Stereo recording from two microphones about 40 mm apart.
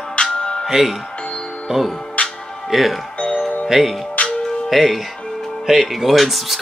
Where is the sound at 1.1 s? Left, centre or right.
Left.